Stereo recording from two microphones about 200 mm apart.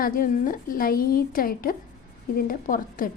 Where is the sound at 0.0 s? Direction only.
45° left (ahead or behind).